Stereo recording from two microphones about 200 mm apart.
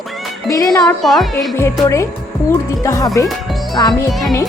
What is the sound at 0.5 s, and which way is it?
Speech, 15° left (ahead or behind).